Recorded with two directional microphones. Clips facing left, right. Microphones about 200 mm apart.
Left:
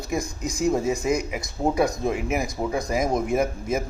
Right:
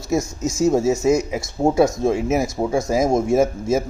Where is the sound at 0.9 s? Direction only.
25° right (ahead or behind).